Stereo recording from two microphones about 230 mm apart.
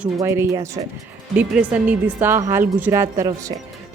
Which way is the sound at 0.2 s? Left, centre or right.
Centre.